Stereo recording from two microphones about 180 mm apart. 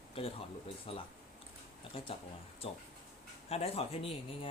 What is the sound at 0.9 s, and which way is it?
A man's voice, 30° left (ahead or behind).